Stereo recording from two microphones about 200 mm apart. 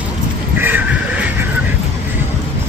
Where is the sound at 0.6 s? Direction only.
10° right (ahead or behind).